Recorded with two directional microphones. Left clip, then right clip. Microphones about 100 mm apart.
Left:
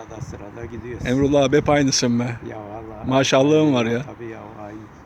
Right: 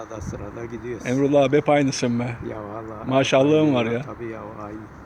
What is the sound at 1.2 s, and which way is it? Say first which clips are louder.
Speech: left 1 dB; 90° left.